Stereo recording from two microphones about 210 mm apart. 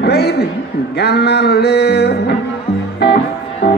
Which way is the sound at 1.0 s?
50° left (ahead or behind).